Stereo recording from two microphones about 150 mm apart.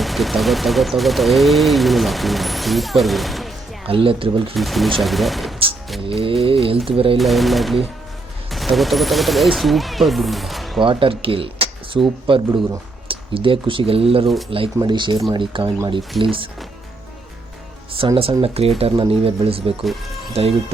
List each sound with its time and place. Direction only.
0.0 s speech: centre (ahead or behind)
3.8 s speech: 35° right (ahead or behind)
4.5 s speech: centre (ahead or behind)
6.1 s speech: 35° right (ahead or behind)
7.2 s speech: centre (ahead or behind)
10.8 s speech: 35° right (ahead or behind)
18.4 s speech: 40° right (ahead or behind)
19.8 s speech: centre (ahead or behind)
20.3 s speech: 40° right (ahead or behind)